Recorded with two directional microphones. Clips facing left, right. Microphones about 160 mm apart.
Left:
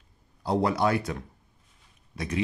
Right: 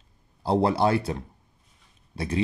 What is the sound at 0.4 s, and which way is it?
Speech, 30° right (ahead or behind).